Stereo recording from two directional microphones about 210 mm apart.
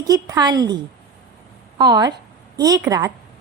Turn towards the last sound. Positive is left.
turn(degrees=-15)  # may be behind; listen again after turning